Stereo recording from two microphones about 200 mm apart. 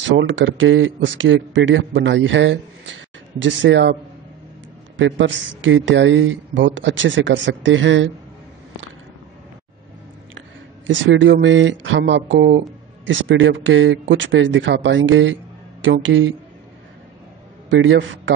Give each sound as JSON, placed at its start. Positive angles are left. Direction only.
{"t": 0.2, "sound": "speech", "side_deg": -70}
{"t": 4.9, "sound": "speech", "side_deg": -70}
{"t": 10.9, "sound": "speech", "side_deg": -65}
{"t": 17.6, "sound": "a man's voice", "side_deg": -65}